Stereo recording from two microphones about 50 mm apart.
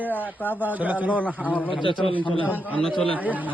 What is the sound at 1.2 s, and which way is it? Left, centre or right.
Speech, left.